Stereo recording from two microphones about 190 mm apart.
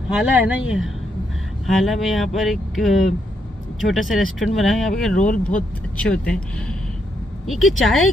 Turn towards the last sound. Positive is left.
turn(degrees=0)  # may be behind; listen again after turning